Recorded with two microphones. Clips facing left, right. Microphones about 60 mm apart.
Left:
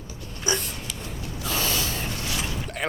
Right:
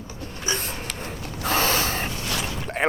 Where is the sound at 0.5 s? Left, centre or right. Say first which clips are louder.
Right 1 dB; right.